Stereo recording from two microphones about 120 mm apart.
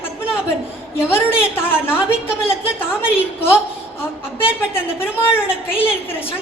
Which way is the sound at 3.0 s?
20° left (ahead or behind).